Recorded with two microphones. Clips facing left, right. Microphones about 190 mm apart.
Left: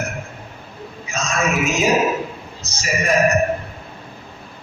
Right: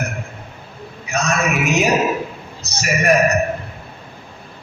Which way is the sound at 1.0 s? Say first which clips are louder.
Right 2 dB; 65° right (ahead or behind).